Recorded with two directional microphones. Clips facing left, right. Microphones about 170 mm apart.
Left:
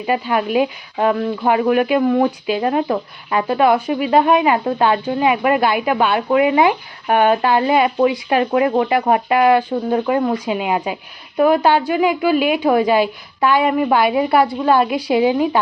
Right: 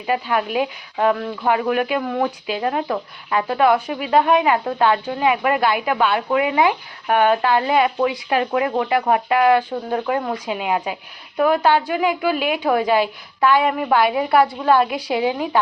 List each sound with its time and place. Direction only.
0.0 s a woman's voice: 10° left (ahead or behind)
8.3 s a woman's voice: 25° left (ahead or behind)